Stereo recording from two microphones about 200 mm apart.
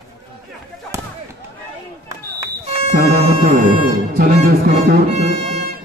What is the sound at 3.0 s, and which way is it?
Speech, 35° right (ahead or behind).